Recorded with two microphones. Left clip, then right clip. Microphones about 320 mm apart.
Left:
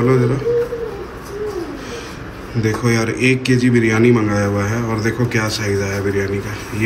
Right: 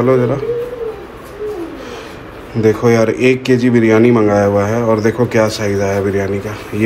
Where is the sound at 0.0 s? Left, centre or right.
Centre.